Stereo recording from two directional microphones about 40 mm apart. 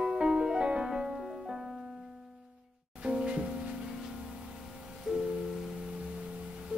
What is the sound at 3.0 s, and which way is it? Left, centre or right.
Music, right.